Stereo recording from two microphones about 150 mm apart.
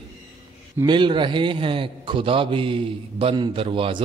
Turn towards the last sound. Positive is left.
turn(degrees=-35)  # may be behind; listen again after turning